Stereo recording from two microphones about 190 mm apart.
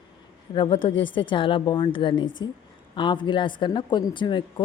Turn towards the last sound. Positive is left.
turn(degrees=25)  # may be behind; listen again after turning